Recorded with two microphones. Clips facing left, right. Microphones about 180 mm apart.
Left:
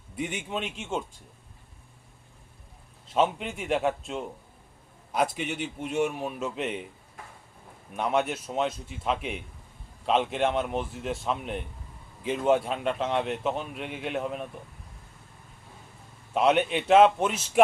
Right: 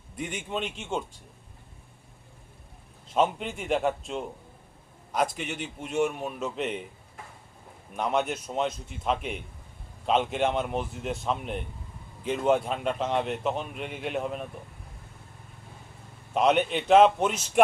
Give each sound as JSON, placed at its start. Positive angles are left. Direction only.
{"t": 0.2, "sound": "a man's voice", "side_deg": 5}
{"t": 3.2, "sound": "a man's voice", "side_deg": 0}
{"t": 7.9, "sound": "a man's voice", "side_deg": 0}
{"t": 16.3, "sound": "a man's voice", "side_deg": 0}